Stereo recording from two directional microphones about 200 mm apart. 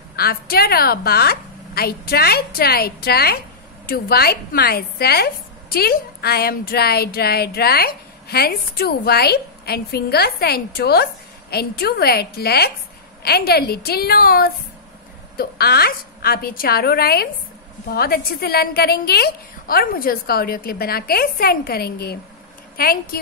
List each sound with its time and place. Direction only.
0.1 s a woman's voice: 50° left (ahead or behind)